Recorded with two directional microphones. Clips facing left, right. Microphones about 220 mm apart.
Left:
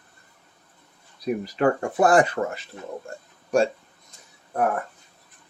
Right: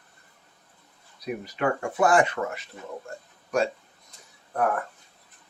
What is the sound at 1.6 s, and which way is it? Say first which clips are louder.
Speech: left 3 dB; 35° left (ahead or behind).